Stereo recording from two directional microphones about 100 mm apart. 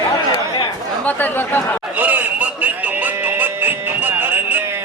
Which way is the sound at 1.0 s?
15° left (ahead or behind).